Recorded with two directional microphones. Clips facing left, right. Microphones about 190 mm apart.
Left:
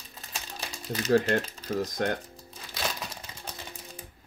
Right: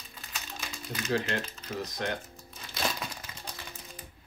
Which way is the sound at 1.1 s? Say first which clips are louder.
Left 9 dB; 50° left (ahead or behind).